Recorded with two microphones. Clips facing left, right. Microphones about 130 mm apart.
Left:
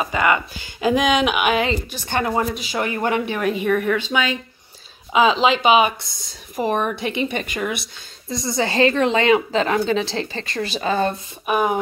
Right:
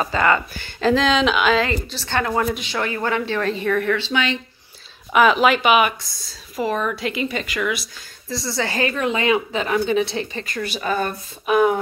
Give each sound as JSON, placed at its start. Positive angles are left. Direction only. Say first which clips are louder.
{"t": 0.0, "sound": "speech", "louder": "right 1 dB", "side_deg": 15}
{"t": 6.6, "sound": "speech", "louder": "left 1 dB", "side_deg": 45}
{"t": 7.8, "sound": "speech", "louder": "even", "side_deg": 20}
{"t": 11.4, "sound": "speech", "louder": "right 3 dB", "side_deg": 10}